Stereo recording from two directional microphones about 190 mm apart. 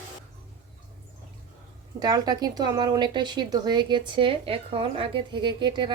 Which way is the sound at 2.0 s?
20° right (ahead or behind).